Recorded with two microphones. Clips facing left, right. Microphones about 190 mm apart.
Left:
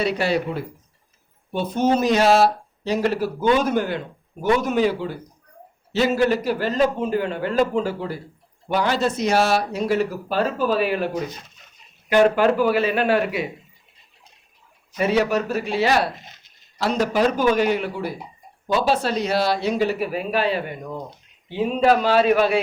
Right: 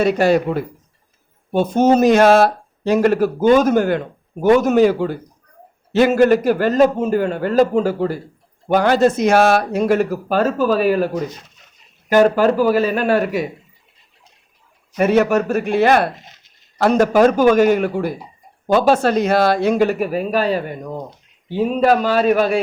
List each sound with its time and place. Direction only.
0.0 s speech: 45° right (ahead or behind)
14.9 s speech: 50° right (ahead or behind)